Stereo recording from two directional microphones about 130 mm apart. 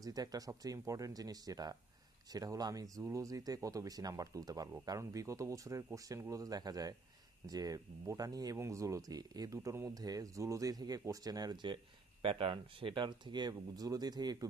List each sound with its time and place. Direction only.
0.0 s speech: 30° right (ahead or behind)